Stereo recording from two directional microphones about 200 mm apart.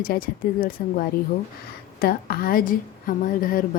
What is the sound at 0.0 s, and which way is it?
A woman's voice, 45° left (ahead or behind).